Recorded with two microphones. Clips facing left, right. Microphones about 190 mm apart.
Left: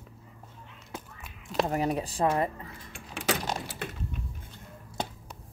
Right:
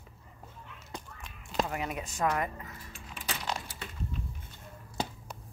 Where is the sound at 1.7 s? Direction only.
35° left (ahead or behind).